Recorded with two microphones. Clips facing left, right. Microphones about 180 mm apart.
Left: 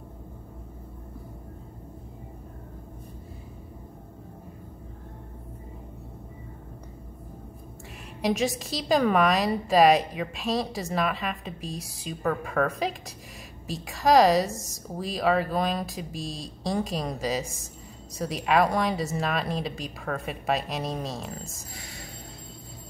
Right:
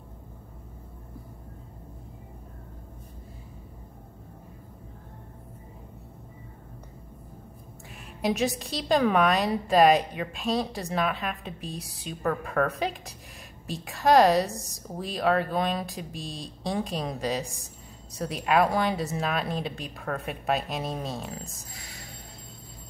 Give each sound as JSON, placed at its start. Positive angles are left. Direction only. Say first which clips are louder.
{"t": 8.2, "sound": "a woman's voice", "louder": "left 1 dB", "side_deg": 0}